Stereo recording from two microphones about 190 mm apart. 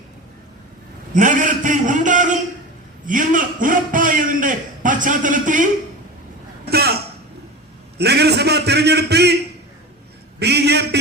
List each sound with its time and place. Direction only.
1.1 s a man's voice: 45° right (ahead or behind)
6.7 s throat clearing: 55° right (ahead or behind)
7.9 s a man's voice: 60° right (ahead or behind)
10.4 s a sound: 60° right (ahead or behind)